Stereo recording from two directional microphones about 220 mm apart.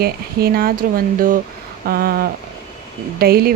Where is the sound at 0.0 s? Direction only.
45° right (ahead or behind).